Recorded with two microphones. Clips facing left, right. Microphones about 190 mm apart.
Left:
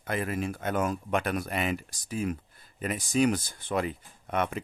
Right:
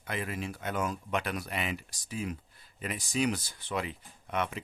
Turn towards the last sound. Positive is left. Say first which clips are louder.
# left 4 dB
turn(degrees=50)  # may be behind; listen again after turning